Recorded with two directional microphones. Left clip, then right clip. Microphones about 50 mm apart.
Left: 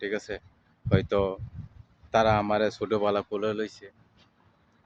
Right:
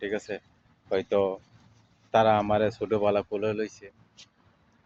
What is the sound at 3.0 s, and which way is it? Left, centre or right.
Speech, left.